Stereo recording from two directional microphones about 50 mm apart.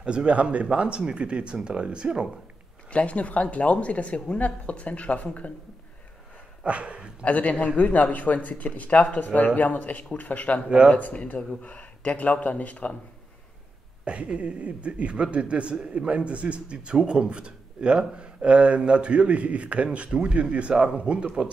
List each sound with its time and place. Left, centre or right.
0.0 s a man's voice: right
2.9 s a woman's voice: left
6.6 s a man's voice: right
7.2 s a woman's voice: left
14.0 s a man's voice: right